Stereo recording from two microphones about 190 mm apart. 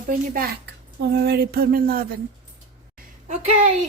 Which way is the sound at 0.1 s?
50° right (ahead or behind).